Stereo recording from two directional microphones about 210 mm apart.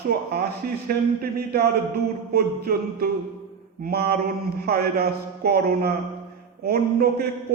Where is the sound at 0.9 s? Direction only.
45° right (ahead or behind).